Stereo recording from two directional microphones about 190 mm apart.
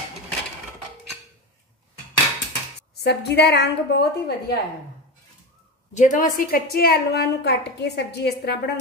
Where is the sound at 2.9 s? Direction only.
60° left (ahead or behind).